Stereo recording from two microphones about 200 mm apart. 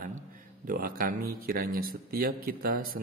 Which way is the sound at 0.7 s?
45° right (ahead or behind).